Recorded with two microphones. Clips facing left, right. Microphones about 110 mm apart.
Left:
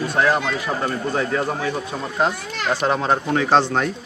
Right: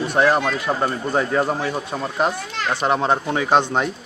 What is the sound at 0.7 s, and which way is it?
Speech, 25° right (ahead or behind).